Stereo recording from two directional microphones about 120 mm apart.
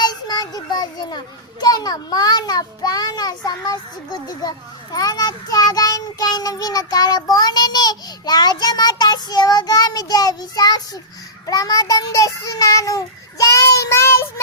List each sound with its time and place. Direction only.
0.0 s child singing: 35° left (ahead or behind)
1.6 s a child's voice: 35° left (ahead or behind)
11.4 s child singing: 30° left (ahead or behind)